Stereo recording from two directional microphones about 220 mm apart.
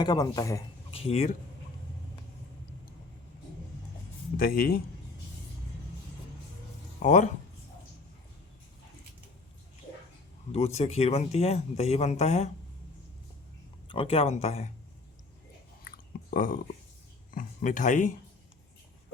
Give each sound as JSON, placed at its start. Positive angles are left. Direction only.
{"t": 0.0, "sound": "a man's voice", "side_deg": 15}
{"t": 0.9, "sound": "speech", "side_deg": 30}
{"t": 4.4, "sound": "speech", "side_deg": 40}
{"t": 7.0, "sound": "speech", "side_deg": 35}
{"t": 10.5, "sound": "speech", "side_deg": 30}
{"t": 13.8, "sound": "speech", "side_deg": 25}
{"t": 15.9, "sound": "chewing", "side_deg": 40}
{"t": 17.3, "sound": "speech", "side_deg": 35}